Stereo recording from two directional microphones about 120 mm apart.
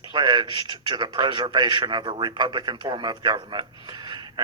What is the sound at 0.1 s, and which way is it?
A man's voice, 35° right (ahead or behind).